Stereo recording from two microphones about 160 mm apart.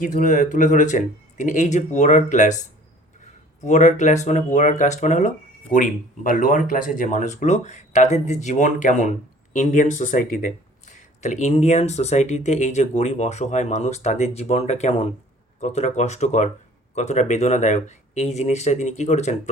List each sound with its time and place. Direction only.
0.0 s speech: 55° left (ahead or behind)